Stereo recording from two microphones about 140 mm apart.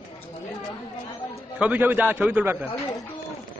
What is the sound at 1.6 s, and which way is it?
A man's voice, 10° right (ahead or behind).